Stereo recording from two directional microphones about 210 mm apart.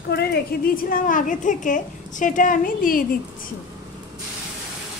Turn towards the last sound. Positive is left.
turn(degrees=40)  # may be behind; listen again after turning